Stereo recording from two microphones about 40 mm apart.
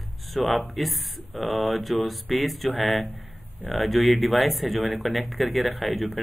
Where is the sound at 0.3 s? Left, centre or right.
Centre.